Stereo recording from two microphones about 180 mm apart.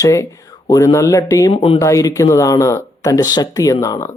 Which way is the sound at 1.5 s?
30° left (ahead or behind).